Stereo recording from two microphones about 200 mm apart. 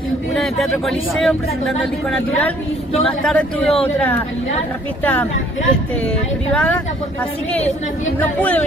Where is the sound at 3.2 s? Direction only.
5° left (ahead or behind).